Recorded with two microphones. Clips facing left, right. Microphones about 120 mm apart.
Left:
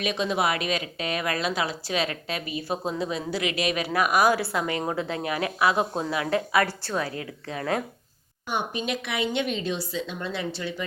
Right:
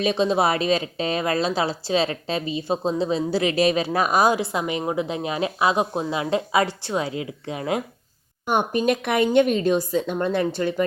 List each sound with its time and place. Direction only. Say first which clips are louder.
0.0 s a woman's voice: right 5 dB; 30° right (ahead or behind)
8.4 s a woman's voice: right 8 dB; 50° right (ahead or behind)